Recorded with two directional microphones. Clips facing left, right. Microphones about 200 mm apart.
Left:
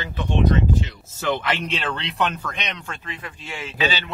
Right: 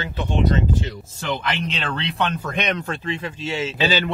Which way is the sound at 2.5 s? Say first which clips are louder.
Right 9 dB; 50° right (ahead or behind).